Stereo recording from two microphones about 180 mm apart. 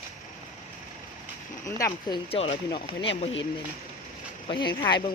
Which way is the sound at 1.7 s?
15° left (ahead or behind).